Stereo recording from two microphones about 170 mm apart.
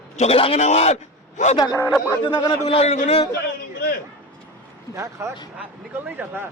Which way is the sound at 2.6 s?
35° left (ahead or behind).